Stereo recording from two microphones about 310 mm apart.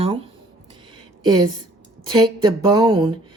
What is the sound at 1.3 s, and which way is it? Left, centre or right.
Speech, centre.